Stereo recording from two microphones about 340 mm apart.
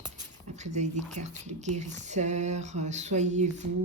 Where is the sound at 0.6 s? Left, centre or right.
Centre.